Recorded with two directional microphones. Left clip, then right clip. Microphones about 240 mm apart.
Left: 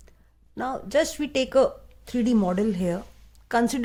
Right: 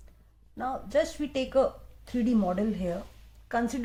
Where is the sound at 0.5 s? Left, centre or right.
Left.